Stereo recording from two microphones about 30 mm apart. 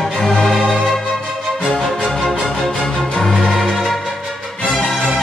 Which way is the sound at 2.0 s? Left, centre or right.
Centre.